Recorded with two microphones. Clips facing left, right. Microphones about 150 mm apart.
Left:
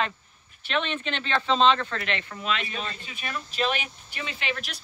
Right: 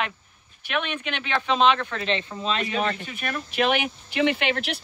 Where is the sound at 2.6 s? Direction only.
70° right (ahead or behind).